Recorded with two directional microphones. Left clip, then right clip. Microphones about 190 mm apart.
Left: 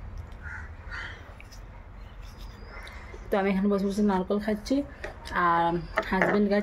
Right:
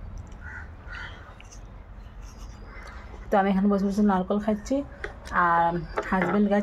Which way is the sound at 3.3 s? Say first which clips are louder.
Right 3 dB; 5° left (ahead or behind).